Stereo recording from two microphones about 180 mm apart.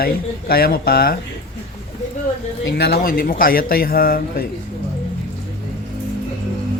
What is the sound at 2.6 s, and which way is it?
Speech, 65° left (ahead or behind).